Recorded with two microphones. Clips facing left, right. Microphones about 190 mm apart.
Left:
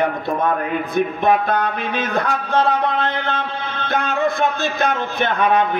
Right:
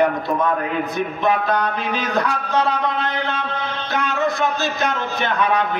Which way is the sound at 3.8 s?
55° left (ahead or behind).